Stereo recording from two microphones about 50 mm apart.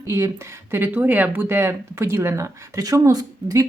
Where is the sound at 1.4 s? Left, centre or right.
Right.